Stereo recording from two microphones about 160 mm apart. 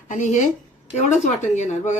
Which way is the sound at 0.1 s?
50° left (ahead or behind).